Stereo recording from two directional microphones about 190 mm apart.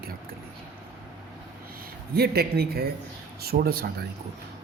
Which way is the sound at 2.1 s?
55° right (ahead or behind).